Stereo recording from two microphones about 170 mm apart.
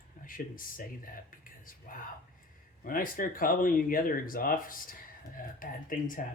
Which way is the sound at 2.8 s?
55° left (ahead or behind).